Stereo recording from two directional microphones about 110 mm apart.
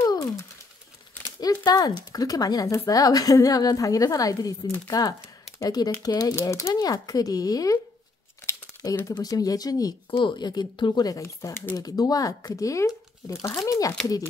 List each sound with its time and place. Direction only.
0.0 s a sound: 30° left (ahead or behind)
1.6 s speech: 40° left (ahead or behind)
6.7 s speech: 35° left (ahead or behind)
9.0 s speech: 35° left (ahead or behind)
10.1 s speech: 45° left (ahead or behind)